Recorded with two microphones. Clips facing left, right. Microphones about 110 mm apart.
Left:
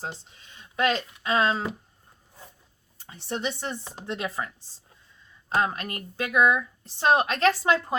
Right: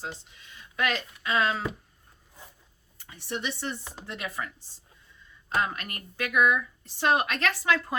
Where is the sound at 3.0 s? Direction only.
30° left (ahead or behind).